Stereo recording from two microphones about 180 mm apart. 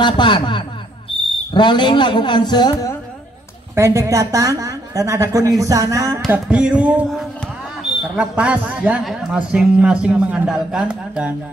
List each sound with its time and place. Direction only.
0.0 s a man's voice: 25° left (ahead or behind)
3.7 s a woman's voice: 15° right (ahead or behind)
6.3 s a sound: 5° right (ahead or behind)
8.2 s a woman's voice: 5° right (ahead or behind)